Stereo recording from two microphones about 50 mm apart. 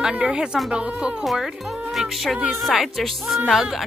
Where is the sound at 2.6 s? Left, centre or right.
Centre.